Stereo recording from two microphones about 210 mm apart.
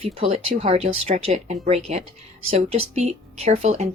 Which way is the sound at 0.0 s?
25° right (ahead or behind).